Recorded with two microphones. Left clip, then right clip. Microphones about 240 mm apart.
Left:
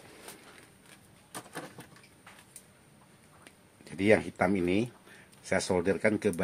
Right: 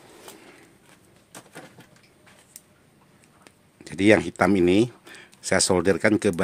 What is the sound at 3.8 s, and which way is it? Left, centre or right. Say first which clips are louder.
Speech: right 7 dB; right.